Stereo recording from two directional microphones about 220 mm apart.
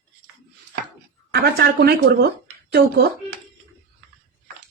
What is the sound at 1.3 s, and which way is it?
Speech, 45° right (ahead or behind).